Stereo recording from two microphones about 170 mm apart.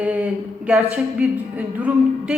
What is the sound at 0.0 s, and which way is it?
A woman's voice, 10° right (ahead or behind).